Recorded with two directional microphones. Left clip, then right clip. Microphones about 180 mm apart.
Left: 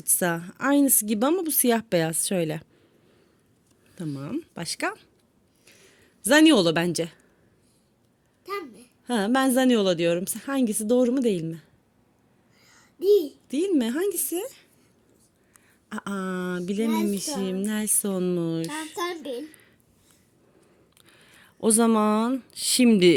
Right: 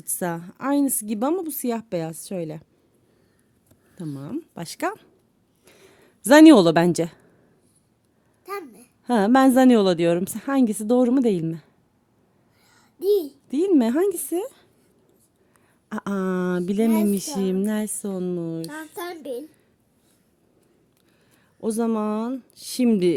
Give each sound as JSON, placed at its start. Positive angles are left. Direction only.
{"t": 0.0, "sound": "a woman's voice", "side_deg": -15}
{"t": 3.9, "sound": "speech", "side_deg": -10}
{"t": 4.4, "sound": "speech", "side_deg": -25}
{"t": 5.6, "sound": "a sound", "side_deg": -40}
{"t": 8.4, "sound": "a child's voice", "side_deg": -25}
{"t": 12.6, "sound": "a sound", "side_deg": -20}
{"t": 13.5, "sound": "a child's voice", "side_deg": -35}
{"t": 15.9, "sound": "a child's voice", "side_deg": -35}
{"t": 17.7, "sound": "a woman's voice", "side_deg": -15}
{"t": 18.9, "sound": "a child's voice", "side_deg": -35}
{"t": 21.0, "sound": "speech", "side_deg": 0}